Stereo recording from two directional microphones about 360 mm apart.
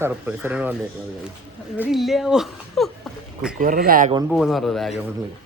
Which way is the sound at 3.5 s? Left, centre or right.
Right.